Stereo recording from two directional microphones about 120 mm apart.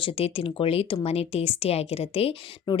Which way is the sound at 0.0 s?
50° left (ahead or behind).